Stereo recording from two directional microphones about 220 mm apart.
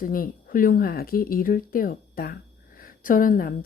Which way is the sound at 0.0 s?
40° left (ahead or behind).